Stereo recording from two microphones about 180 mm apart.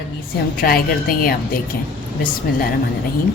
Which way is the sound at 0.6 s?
55° left (ahead or behind).